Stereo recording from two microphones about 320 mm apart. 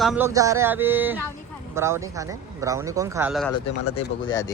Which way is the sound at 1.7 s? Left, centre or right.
Centre.